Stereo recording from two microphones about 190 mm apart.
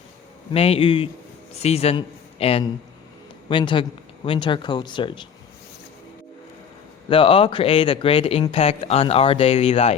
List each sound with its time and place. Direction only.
0.5 s speech: 30° left (ahead or behind)
7.1 s speech: 25° left (ahead or behind)